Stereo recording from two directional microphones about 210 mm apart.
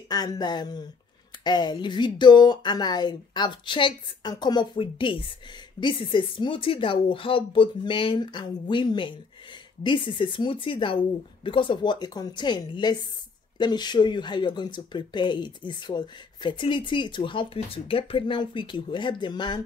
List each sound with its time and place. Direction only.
0.1 s speech: 20° left (ahead or behind)